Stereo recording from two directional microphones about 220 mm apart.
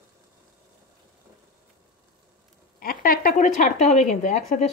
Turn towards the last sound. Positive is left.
turn(degrees=30)  # may be behind; listen again after turning